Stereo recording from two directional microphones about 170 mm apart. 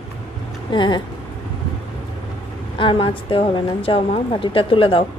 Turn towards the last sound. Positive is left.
turn(degrees=30)  # may be behind; listen again after turning